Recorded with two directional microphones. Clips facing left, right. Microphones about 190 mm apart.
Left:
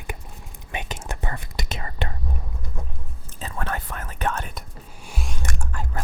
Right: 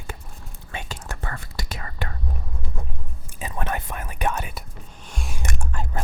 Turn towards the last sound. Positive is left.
turn(degrees=-20)  # may be behind; listen again after turning